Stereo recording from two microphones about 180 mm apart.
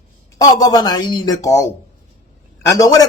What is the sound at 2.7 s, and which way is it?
Speech, 20° left (ahead or behind).